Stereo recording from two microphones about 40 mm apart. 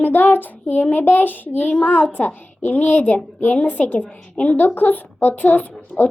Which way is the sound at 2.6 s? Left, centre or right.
Left.